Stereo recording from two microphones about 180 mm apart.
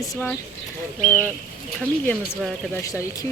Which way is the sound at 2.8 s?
15° left (ahead or behind).